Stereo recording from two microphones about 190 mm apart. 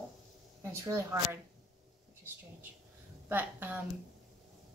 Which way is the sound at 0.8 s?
15° right (ahead or behind).